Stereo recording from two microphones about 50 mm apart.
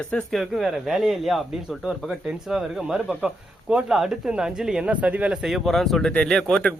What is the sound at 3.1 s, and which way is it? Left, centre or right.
Speech, right.